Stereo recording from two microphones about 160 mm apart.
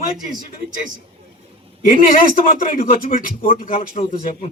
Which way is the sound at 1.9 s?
65° left (ahead or behind).